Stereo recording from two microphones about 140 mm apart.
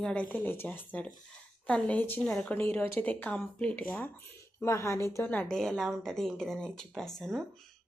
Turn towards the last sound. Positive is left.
turn(degrees=0)  # may be behind; listen again after turning